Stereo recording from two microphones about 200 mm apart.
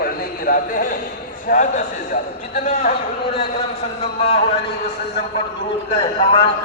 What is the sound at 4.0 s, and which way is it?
Speech, 30° left (ahead or behind).